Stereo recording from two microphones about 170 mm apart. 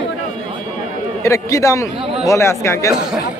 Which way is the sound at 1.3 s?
20° left (ahead or behind).